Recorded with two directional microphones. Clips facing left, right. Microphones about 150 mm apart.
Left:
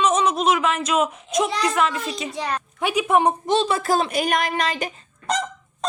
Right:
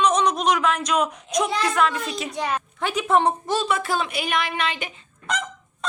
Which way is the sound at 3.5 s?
30° left (ahead or behind).